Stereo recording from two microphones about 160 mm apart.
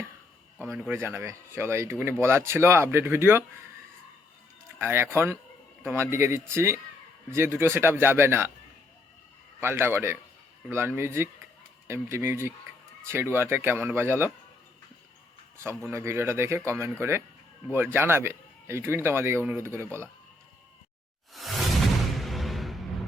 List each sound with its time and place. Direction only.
0.6 s speech: 10° right (ahead or behind)
4.8 s speech: 15° right (ahead or behind)
9.6 s speech: 15° right (ahead or behind)
15.5 s speech: 15° right (ahead or behind)
21.4 s whoosh: centre (ahead or behind)
22.2 s a sound: centre (ahead or behind)